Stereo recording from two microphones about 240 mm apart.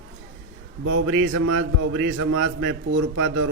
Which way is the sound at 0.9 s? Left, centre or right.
Right.